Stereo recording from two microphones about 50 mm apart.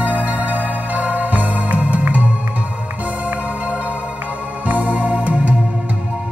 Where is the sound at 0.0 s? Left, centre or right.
Right.